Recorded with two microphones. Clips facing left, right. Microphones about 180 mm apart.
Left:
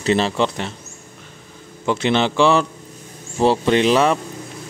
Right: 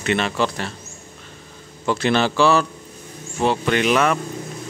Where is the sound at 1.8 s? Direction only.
20° left (ahead or behind).